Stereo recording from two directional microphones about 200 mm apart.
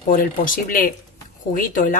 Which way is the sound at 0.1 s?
45° left (ahead or behind).